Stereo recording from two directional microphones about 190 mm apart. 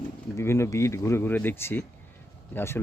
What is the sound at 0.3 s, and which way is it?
Speech, 15° left (ahead or behind).